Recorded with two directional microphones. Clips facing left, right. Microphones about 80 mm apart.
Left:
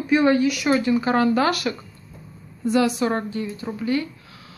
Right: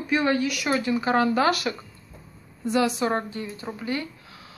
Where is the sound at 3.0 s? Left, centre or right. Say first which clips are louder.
Left 2 dB; centre.